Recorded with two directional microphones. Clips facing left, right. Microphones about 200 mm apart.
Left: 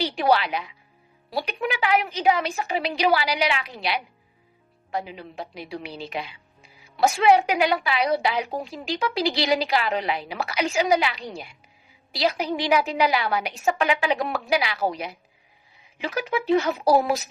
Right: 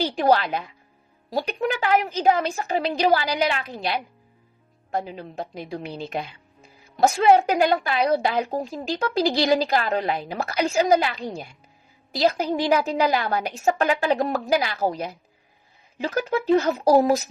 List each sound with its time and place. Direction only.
0.0 s speech: 45° right (ahead or behind)